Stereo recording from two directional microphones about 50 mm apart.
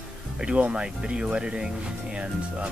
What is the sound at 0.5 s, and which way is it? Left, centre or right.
Speech, right.